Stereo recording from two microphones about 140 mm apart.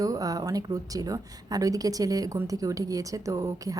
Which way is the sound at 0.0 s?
25° right (ahead or behind).